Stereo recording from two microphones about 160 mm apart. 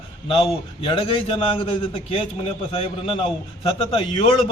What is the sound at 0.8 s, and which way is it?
A man's voice, 35° left (ahead or behind).